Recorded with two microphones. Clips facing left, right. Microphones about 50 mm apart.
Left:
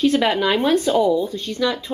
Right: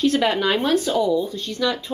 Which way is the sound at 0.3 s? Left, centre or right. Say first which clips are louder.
Left 2 dB; centre.